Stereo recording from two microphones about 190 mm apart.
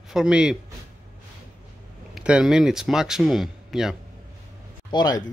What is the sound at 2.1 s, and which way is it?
Speech, 5° right (ahead or behind).